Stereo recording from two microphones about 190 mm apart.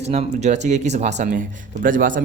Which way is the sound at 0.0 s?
35° right (ahead or behind).